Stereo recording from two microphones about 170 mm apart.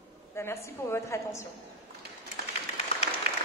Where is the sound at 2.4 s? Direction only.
65° right (ahead or behind).